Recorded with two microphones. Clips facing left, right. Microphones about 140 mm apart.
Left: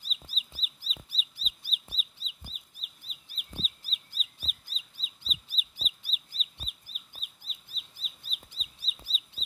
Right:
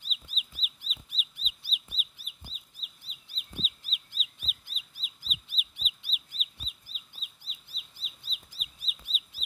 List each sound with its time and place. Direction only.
0.0 s bird: 35° left (ahead or behind)
1.6 s bird: 45° left (ahead or behind)
2.4 s chicken: 50° left (ahead or behind)
3.5 s bird: 35° left (ahead or behind)
7.2 s bird: 45° left (ahead or behind)
8.5 s chicken: 30° left (ahead or behind)